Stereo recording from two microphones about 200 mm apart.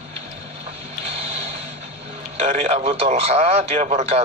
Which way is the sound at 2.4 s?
35° right (ahead or behind).